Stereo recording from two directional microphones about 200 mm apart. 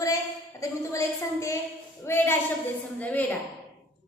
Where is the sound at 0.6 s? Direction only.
15° left (ahead or behind).